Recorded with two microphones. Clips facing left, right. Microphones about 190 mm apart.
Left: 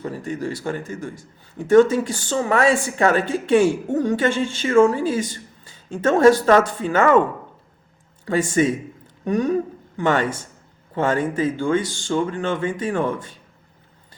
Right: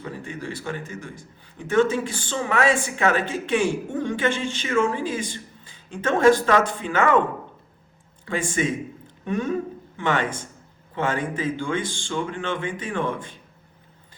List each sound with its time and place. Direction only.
0.0 s speech: 40° left (ahead or behind)
8.2 s speech: 40° left (ahead or behind)